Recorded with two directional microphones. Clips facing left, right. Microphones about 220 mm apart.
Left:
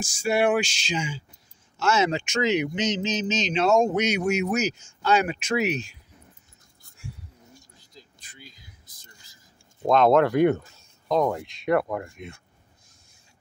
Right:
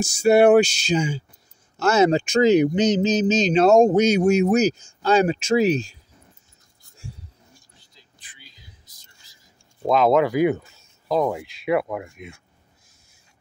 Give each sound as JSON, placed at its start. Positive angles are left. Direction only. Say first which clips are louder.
{"t": 0.0, "sound": "speech", "louder": "right 8 dB", "side_deg": -40}
{"t": 7.8, "sound": "vehicle", "louder": "left 6 dB", "side_deg": 40}
{"t": 9.8, "sound": "speech", "louder": "right 1 dB", "side_deg": 0}